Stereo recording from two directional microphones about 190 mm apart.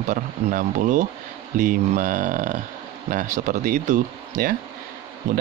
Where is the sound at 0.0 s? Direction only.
45° right (ahead or behind).